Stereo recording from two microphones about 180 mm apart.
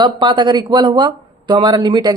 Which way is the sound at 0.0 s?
25° right (ahead or behind).